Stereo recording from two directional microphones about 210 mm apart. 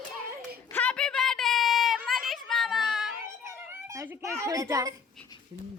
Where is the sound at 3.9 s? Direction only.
15° right (ahead or behind).